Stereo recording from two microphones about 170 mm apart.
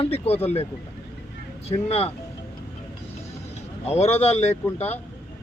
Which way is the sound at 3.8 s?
40° left (ahead or behind).